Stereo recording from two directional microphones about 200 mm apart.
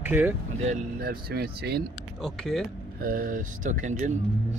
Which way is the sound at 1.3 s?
55° right (ahead or behind).